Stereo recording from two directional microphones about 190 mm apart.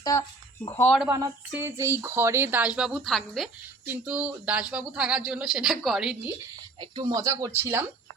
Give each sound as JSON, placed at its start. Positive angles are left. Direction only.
{"t": 0.0, "sound": "speech", "side_deg": 20}
{"t": 1.1, "sound": "speech", "side_deg": -15}
{"t": 6.9, "sound": "speech", "side_deg": -20}